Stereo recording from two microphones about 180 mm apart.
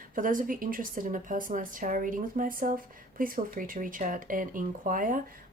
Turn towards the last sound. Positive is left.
turn(degrees=-50)  # may be behind; listen again after turning